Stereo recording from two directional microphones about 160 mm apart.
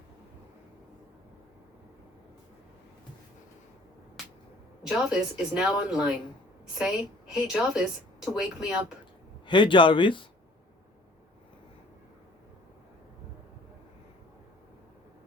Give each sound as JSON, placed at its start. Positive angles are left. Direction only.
{"t": 4.8, "sound": "a woman's voice", "side_deg": -5}
{"t": 9.5, "sound": "speech", "side_deg": 30}